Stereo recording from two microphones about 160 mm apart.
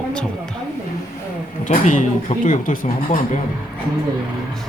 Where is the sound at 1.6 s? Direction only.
50° left (ahead or behind).